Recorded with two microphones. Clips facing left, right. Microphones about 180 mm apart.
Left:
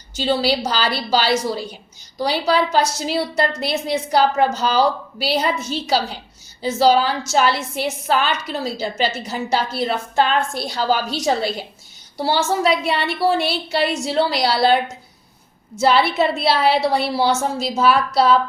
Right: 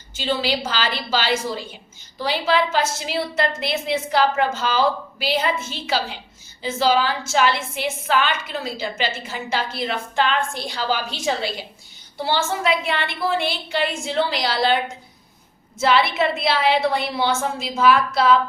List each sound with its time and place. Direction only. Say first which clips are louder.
0.3 s a woman's voice: left 4 dB; 40° left (ahead or behind)
15.8 s a woman's voice: left 2 dB; 35° left (ahead or behind)